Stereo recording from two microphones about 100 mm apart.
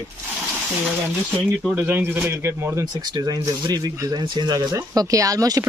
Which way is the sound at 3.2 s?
40° right (ahead or behind).